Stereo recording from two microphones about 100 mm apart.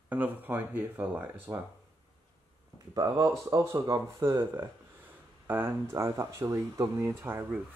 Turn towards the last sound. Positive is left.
turn(degrees=-25)  # may be behind; listen again after turning